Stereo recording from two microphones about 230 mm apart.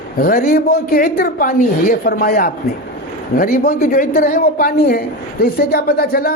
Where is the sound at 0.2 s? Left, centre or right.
Left.